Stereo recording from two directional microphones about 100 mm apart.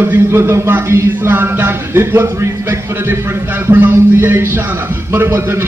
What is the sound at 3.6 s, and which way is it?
A man's voice, 20° right (ahead or behind).